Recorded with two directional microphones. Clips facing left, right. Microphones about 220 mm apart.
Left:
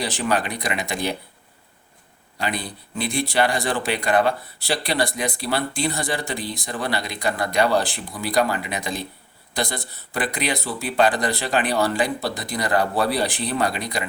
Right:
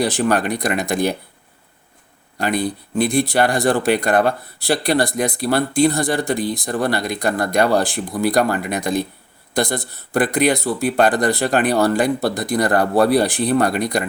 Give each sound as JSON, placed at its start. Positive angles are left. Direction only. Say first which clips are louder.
{"t": 0.0, "sound": "speech", "louder": "right 6 dB", "side_deg": -50}
{"t": 2.4, "sound": "speech", "louder": "right 7 dB", "side_deg": -50}